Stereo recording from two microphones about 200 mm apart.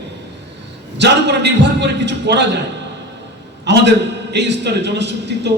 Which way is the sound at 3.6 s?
60° right (ahead or behind).